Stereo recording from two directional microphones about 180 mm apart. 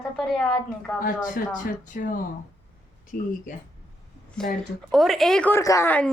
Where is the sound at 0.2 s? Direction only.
Centre (ahead or behind).